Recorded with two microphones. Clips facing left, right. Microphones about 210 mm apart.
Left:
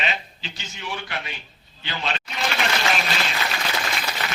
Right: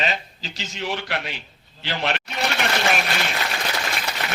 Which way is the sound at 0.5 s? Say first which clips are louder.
Right 6 dB; 85° right.